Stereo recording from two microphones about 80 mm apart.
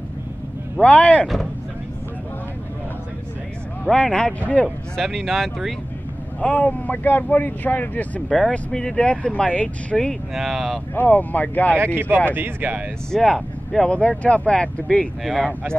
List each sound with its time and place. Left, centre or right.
0.7 s speech: centre
1.2 s speech: centre
3.9 s speech: centre
4.9 s speech: centre
6.4 s speech: centre
8.3 s speech: centre
10.3 s speech: centre
11.0 s speech: left
11.8 s speech: right
13.1 s speech: centre
15.2 s speech: centre